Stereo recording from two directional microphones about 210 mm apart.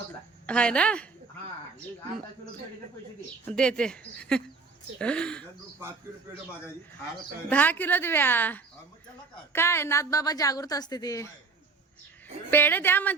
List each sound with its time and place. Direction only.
0.4 s speech: 5° left (ahead or behind)
3.5 s speech: 5° left (ahead or behind)
7.5 s a woman's voice: 10° left (ahead or behind)
12.5 s a woman's voice: 10° left (ahead or behind)